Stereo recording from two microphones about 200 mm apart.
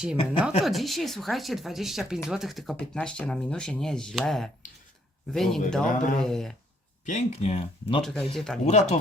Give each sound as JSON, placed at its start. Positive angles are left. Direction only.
{"t": 0.6, "sound": "speech", "side_deg": 0}
{"t": 5.8, "sound": "speech", "side_deg": 40}
{"t": 6.1, "sound": "speech", "side_deg": 0}
{"t": 7.0, "sound": "speech", "side_deg": 35}
{"t": 8.0, "sound": "speech", "side_deg": 0}
{"t": 8.6, "sound": "speech", "side_deg": 35}